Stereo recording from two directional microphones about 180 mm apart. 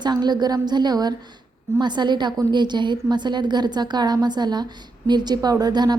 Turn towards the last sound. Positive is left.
turn(degrees=-20)  # may be behind; listen again after turning